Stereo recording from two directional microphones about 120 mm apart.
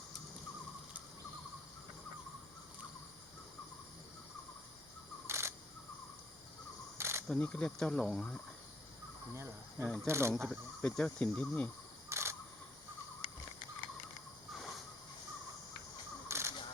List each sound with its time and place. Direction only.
5.3 s camera: 20° right (ahead or behind)
7.0 s camera: 20° right (ahead or behind)
7.3 s speech: 10° left (ahead or behind)
9.7 s speech: 5° left (ahead or behind)
10.1 s speech: 20° right (ahead or behind)
10.3 s speech: centre (ahead or behind)
12.0 s camera: 20° right (ahead or behind)
16.3 s crow: 25° right (ahead or behind)